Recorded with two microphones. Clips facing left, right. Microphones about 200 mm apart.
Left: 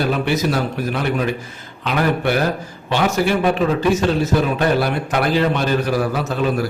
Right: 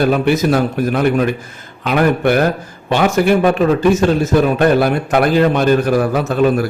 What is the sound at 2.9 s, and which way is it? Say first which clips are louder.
A man's voice: right 5 dB; 50° right (ahead or behind).